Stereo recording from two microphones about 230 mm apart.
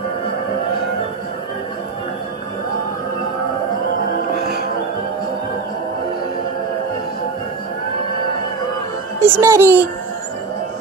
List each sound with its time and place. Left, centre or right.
9.2 s a child's voice: centre